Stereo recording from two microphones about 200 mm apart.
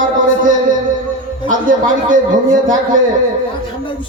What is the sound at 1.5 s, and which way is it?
A man's voice, 40° right (ahead or behind).